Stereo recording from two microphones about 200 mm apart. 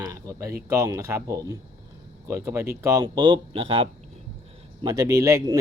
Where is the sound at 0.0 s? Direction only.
15° right (ahead or behind).